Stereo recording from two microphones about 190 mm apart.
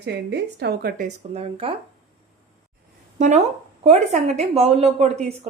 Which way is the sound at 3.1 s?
40° right (ahead or behind).